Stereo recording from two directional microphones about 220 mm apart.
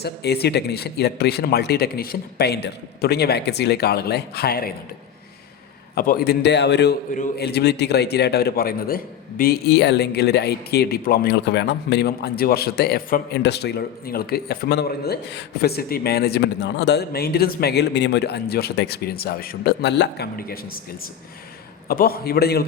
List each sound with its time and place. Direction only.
0.0 s speech: 45° left (ahead or behind)
5.9 s speech: 45° left (ahead or behind)
21.8 s speech: 45° left (ahead or behind)